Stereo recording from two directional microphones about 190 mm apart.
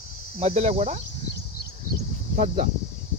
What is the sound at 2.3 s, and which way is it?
Speech, 45° right (ahead or behind).